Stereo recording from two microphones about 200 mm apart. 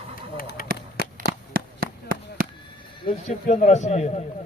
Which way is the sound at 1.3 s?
45° right (ahead or behind).